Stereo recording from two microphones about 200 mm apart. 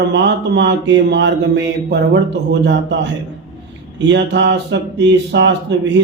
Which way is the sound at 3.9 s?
65° right (ahead or behind).